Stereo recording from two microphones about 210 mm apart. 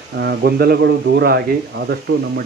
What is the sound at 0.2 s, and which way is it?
Speech, 50° right (ahead or behind).